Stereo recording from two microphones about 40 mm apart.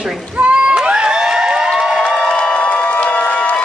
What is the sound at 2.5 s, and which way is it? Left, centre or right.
Crowd, left.